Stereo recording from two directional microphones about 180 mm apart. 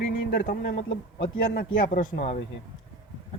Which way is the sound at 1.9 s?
45° left (ahead or behind).